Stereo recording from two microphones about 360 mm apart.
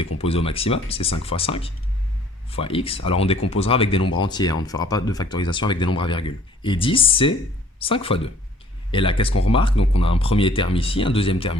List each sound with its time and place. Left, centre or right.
0.2 s speech: centre